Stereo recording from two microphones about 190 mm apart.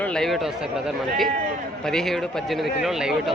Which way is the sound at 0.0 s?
5° left (ahead or behind).